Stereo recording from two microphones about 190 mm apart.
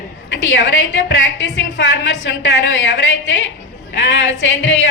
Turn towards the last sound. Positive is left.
turn(degrees=75)  # may be behind; listen again after turning